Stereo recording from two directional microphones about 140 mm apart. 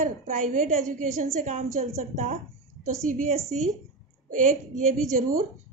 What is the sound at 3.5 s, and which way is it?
A woman's voice, 65° right (ahead or behind).